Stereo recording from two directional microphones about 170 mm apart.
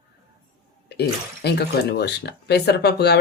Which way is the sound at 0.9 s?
75° left (ahead or behind).